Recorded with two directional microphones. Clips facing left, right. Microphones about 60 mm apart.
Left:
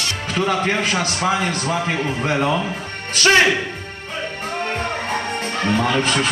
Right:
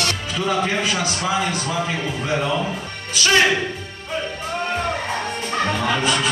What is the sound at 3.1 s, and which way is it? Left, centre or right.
Speech, left.